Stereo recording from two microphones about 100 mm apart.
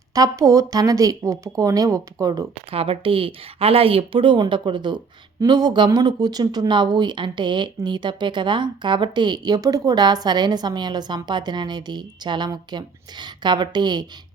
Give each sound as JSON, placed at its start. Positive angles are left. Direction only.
{"t": 0.1, "sound": "speech", "side_deg": -35}
{"t": 2.6, "sound": "a woman's voice", "side_deg": -70}